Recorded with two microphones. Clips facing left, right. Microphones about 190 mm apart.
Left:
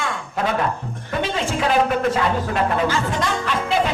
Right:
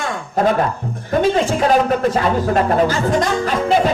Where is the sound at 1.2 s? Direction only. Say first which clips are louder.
Right 6 dB; 40° right (ahead or behind).